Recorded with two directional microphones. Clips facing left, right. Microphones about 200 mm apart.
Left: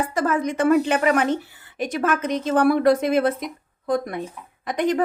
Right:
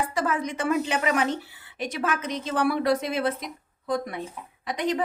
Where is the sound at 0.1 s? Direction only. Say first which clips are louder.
Left 5 dB; 50° left (ahead or behind).